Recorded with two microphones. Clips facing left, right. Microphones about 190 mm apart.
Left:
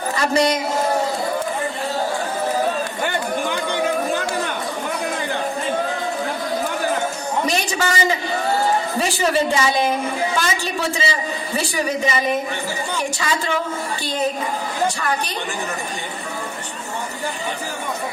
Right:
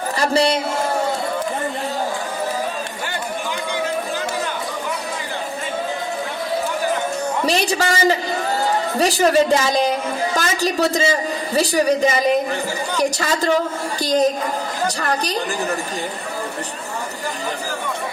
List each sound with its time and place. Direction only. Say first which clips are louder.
0.2 s a man's voice: right 1 dB; 30° right (ahead or behind)
7.4 s a man's voice: right 4 dB; 35° right (ahead or behind)